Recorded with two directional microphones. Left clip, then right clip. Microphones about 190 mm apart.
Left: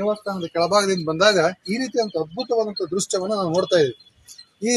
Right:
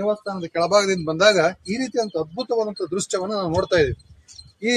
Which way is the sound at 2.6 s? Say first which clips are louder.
Left 1 dB; 30° left (ahead or behind).